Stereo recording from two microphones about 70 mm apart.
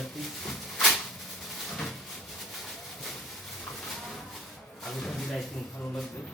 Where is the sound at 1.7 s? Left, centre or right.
Centre.